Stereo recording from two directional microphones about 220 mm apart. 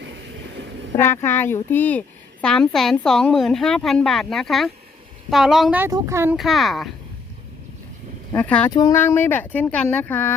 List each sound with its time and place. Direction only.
0.0 s train: 55° right (ahead or behind)
0.9 s a woman's voice: 10° left (ahead or behind); by 6.3 s 10° right (ahead or behind)
6.3 s a woman's voice: centre (ahead or behind)
8.3 s speech: 5° left (ahead or behind)